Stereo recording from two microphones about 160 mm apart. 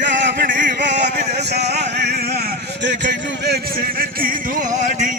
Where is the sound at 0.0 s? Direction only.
85° right.